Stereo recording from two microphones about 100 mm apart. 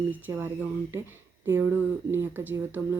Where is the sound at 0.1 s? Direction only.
20° right (ahead or behind).